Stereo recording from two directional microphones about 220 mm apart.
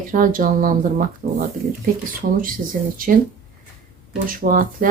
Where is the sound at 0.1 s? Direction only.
40° right (ahead or behind).